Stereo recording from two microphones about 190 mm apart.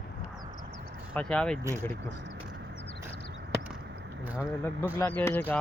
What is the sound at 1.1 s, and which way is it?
Speech, 5° left (ahead or behind).